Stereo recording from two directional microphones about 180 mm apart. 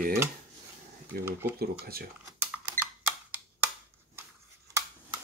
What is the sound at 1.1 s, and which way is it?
Speech, 60° right (ahead or behind).